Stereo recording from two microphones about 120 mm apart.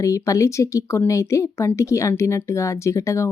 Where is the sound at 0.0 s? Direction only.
25° left (ahead or behind).